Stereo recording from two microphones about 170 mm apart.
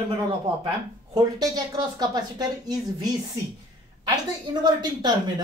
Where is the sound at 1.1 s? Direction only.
25° right (ahead or behind).